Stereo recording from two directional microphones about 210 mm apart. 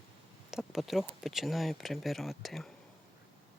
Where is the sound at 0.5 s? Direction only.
Centre (ahead or behind).